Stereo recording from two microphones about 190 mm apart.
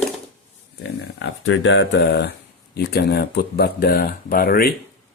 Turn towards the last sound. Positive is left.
turn(degrees=55)  # may be behind; listen again after turning